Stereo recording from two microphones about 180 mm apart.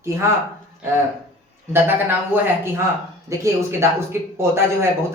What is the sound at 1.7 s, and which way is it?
Speech, 10° right (ahead or behind).